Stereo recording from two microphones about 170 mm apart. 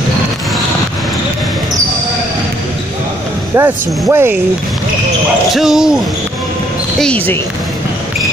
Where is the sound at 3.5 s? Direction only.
15° right (ahead or behind).